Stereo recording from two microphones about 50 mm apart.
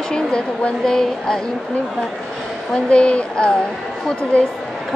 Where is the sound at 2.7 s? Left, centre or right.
Centre.